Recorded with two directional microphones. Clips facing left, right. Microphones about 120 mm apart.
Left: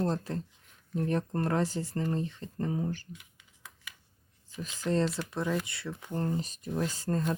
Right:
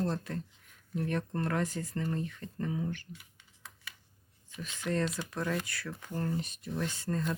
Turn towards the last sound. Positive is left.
turn(degrees=40)  # may be behind; listen again after turning